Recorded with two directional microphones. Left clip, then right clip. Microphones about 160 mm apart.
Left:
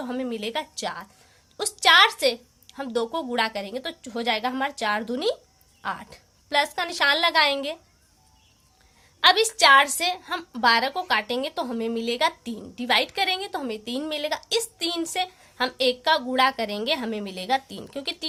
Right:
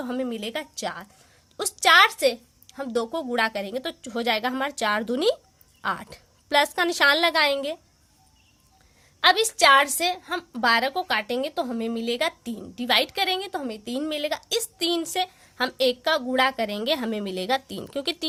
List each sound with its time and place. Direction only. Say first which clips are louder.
0.0 s a woman's voice: even; 45° right (ahead or behind)
9.2 s a woman's voice: left 1 dB; 40° right (ahead or behind)